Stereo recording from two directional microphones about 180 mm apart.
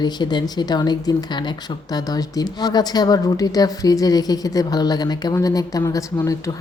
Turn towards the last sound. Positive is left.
turn(degrees=20)  # may be behind; listen again after turning